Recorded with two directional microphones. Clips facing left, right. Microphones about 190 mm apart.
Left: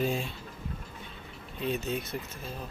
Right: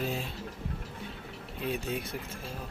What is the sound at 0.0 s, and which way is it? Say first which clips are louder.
Speech: left 4 dB; 5° right (ahead or behind).